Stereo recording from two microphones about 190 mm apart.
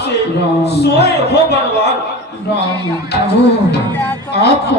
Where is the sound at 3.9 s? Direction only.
10° left (ahead or behind).